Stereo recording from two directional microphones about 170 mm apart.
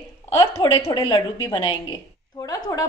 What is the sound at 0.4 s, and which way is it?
A woman's voice, 20° left (ahead or behind).